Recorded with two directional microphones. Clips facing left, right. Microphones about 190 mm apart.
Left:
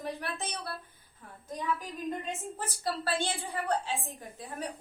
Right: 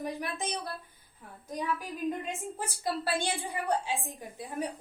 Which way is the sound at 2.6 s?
15° right (ahead or behind).